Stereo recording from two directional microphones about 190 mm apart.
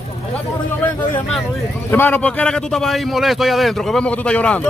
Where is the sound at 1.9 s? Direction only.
10° left (ahead or behind).